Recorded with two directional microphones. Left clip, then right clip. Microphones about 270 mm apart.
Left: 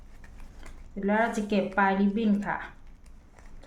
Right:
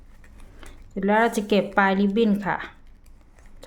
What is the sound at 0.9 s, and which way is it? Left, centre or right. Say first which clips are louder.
Speech: right 6 dB; right.